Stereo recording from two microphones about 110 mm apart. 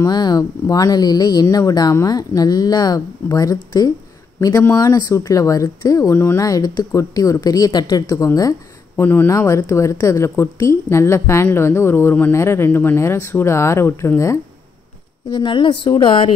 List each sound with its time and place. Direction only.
0.0 s speech: 40° left (ahead or behind)
8.9 s a woman's voice: 20° left (ahead or behind)
15.3 s speech: 45° left (ahead or behind)